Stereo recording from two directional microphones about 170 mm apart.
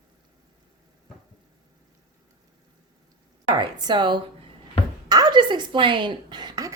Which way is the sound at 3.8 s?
25° right (ahead or behind).